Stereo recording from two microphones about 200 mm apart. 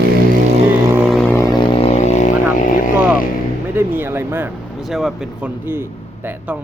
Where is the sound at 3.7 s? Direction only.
10° right (ahead or behind).